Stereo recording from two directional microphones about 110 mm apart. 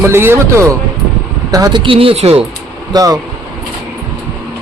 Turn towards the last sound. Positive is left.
turn(degrees=-35)  # may be behind; listen again after turning